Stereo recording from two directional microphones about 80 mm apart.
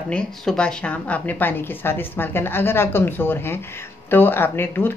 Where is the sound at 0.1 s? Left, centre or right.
Centre.